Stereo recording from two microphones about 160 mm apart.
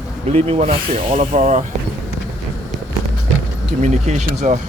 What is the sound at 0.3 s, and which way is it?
Speech, 40° right (ahead or behind).